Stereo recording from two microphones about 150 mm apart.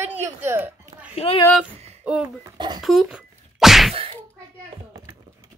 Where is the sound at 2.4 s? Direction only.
30° right (ahead or behind).